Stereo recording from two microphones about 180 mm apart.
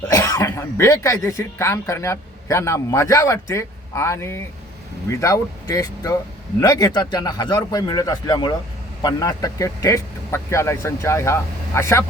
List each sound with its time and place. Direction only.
0.1 s speech: 15° left (ahead or behind)